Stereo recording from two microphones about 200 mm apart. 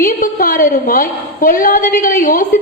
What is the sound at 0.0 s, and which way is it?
A woman's voice, 45° left (ahead or behind).